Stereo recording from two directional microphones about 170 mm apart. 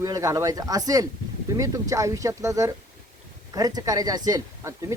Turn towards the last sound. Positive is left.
turn(degrees=-20)  # may be behind; listen again after turning